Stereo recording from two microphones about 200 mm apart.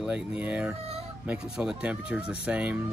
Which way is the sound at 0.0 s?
5° right (ahead or behind).